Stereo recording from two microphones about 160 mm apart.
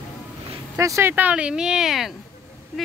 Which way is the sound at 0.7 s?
20° right (ahead or behind).